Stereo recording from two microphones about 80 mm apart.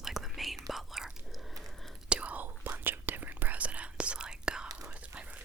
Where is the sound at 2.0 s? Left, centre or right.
Centre.